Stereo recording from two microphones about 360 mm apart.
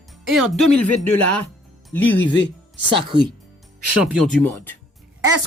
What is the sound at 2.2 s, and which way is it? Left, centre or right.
Speech, left.